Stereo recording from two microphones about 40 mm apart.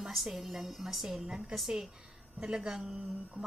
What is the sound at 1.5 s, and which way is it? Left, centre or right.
Speech, centre.